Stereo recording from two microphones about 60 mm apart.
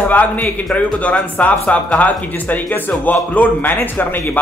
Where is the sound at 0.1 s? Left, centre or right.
Left.